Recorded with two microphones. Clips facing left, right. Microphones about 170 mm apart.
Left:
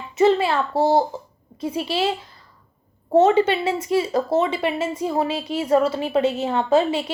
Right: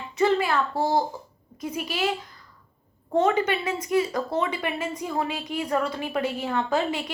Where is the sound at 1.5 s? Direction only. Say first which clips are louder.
Left 6 dB; 30° left (ahead or behind).